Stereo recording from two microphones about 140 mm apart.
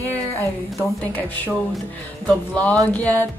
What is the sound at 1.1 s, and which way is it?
Music, 10° left (ahead or behind).